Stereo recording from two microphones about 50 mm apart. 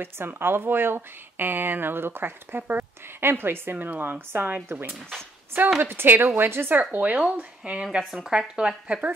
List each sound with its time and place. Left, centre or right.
0.0 s speech: right
3.7 s speech: right
4.0 s speech: right
5.8 s speech: right
6.8 s speech: right
8.0 s speech: centre